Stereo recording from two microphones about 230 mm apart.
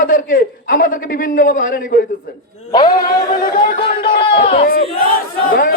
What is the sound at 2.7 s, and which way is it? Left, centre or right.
Music, centre.